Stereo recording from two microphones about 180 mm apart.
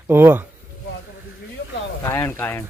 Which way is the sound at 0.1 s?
15° right (ahead or behind).